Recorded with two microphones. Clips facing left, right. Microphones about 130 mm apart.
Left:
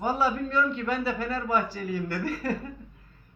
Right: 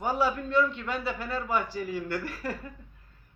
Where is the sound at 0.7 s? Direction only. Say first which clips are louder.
Left 4 dB; 40° left (ahead or behind).